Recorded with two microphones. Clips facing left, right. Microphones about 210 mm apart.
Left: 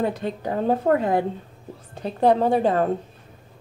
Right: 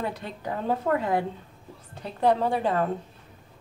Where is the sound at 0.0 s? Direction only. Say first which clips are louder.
Left 7 dB; 40° left (ahead or behind).